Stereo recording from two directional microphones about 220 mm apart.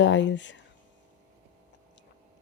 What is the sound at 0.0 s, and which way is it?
Speech, 55° left (ahead or behind).